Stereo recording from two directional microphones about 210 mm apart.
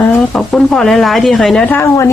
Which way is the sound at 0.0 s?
5° left (ahead or behind).